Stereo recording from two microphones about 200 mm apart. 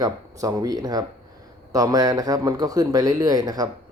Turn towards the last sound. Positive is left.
turn(degrees=-20)  # may be behind; listen again after turning